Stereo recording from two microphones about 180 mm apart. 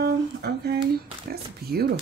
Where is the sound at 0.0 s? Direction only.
60° right (ahead or behind).